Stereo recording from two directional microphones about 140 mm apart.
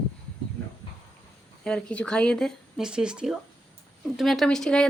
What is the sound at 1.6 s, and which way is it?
Speech, 5° left (ahead or behind).